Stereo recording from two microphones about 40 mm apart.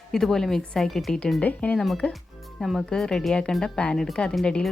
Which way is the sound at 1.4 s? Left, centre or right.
Left.